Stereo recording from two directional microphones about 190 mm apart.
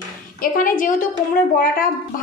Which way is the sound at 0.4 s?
45° left (ahead or behind).